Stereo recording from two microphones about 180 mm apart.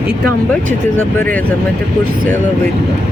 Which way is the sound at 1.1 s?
10° left (ahead or behind).